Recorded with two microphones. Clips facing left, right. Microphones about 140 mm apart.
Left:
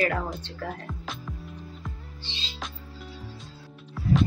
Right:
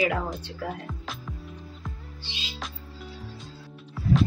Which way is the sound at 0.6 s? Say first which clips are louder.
Right 1 dB; centre (ahead or behind).